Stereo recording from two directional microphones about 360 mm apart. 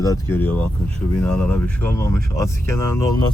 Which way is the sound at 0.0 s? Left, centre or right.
Centre.